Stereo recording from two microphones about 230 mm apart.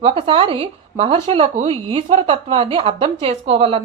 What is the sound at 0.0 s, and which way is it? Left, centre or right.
Speech, right.